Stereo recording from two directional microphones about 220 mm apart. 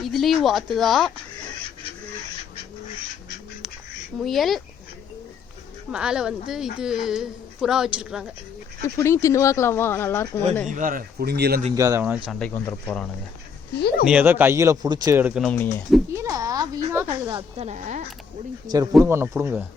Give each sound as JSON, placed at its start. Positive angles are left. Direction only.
{"t": 0.0, "sound": "speech", "side_deg": 0}
{"t": 4.2, "sound": "speech", "side_deg": 0}
{"t": 5.9, "sound": "speech", "side_deg": -5}
{"t": 9.0, "sound": "speech", "side_deg": 15}
{"t": 10.7, "sound": "speech", "side_deg": -35}
{"t": 11.7, "sound": "speech", "side_deg": -15}
{"t": 14.1, "sound": "speech", "side_deg": -10}
{"t": 15.4, "sound": "speech", "side_deg": 5}
{"t": 16.1, "sound": "speech", "side_deg": -15}
{"t": 17.3, "sound": "a woman's voice", "side_deg": -30}
{"t": 18.7, "sound": "speech", "side_deg": -15}